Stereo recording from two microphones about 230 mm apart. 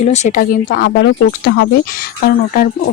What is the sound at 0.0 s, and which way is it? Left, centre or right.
Speech, left.